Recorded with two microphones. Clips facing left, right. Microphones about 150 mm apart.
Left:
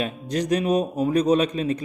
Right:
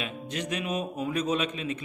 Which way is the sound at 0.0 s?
40° left (ahead or behind).